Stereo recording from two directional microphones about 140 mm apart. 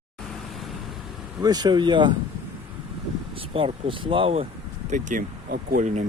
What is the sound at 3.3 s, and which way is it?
Speech, 40° right (ahead or behind).